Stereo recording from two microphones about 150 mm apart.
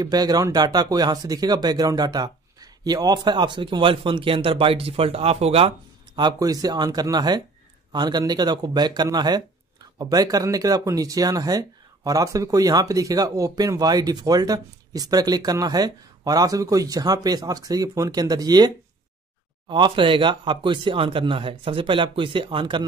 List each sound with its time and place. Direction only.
0.0 s speech: 25° right (ahead or behind)
6.1 s speech: 25° right (ahead or behind)
19.7 s speech: 35° right (ahead or behind)